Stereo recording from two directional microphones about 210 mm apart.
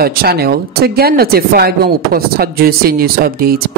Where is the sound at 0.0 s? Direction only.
45° right (ahead or behind).